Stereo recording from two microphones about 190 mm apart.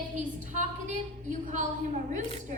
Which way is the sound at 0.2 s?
40° right (ahead or behind).